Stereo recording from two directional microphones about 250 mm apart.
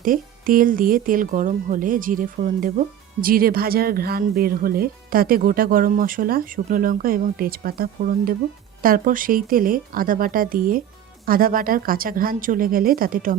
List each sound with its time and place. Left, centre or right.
0.0 s speech: right